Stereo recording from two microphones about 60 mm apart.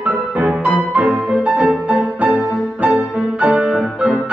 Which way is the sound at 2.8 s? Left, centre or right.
Right.